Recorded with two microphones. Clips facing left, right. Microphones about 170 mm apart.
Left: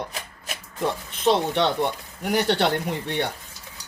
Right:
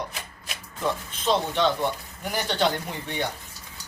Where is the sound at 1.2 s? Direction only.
65° left (ahead or behind).